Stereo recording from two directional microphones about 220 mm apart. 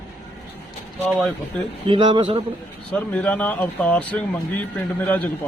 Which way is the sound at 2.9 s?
5° left (ahead or behind).